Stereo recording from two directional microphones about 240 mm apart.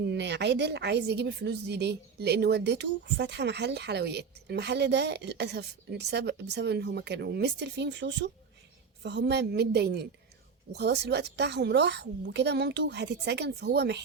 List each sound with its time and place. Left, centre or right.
0.0 s a woman's voice: right